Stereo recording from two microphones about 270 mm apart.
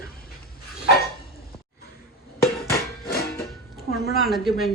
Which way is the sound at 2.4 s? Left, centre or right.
Left.